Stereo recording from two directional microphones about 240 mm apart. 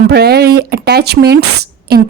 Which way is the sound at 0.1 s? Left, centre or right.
Right.